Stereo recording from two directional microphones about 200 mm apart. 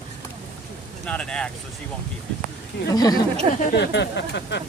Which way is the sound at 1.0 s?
5° left (ahead or behind).